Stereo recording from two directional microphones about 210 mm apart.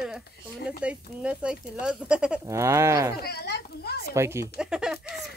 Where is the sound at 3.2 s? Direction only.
50° left (ahead or behind).